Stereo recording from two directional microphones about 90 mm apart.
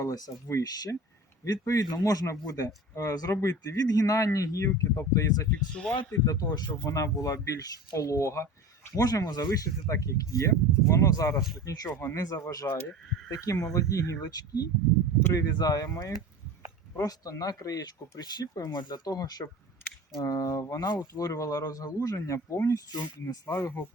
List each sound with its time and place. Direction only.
0.0 s speech: 40° left (ahead or behind)
5.7 s speech: 10° left (ahead or behind)
6.2 s speech: 45° left (ahead or behind)
6.9 s speech: 35° left (ahead or behind)
9.0 s speech: 45° left (ahead or behind)
9.5 s speech: 40° left (ahead or behind)